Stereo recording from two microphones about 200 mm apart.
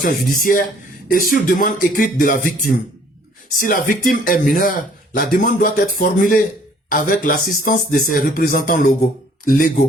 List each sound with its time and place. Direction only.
0.0 s a man's voice: 45° left (ahead or behind)